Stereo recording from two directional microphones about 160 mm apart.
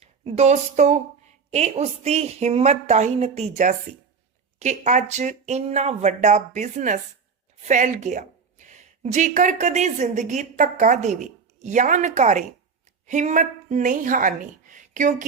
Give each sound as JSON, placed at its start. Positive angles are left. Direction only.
{"t": 0.0, "sound": "a woman's voice", "side_deg": -40}
{"t": 4.6, "sound": "a woman's voice", "side_deg": -45}